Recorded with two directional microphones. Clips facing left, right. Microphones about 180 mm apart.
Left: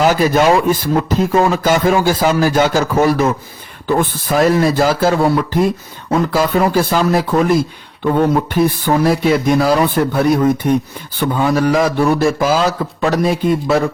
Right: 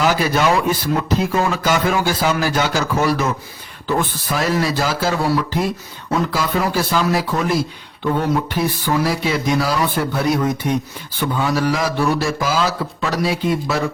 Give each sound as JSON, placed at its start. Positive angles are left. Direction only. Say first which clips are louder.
{"t": 0.0, "sound": "speech", "louder": "left 5 dB", "side_deg": 45}